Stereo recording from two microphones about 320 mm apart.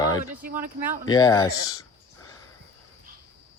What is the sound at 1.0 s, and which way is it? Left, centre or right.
Speech, centre.